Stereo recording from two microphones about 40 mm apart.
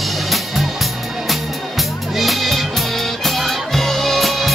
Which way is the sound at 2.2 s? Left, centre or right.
Centre.